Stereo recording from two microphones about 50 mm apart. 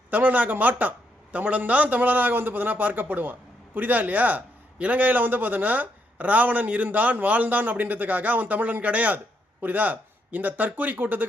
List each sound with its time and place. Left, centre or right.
0.1 s a man's voice: right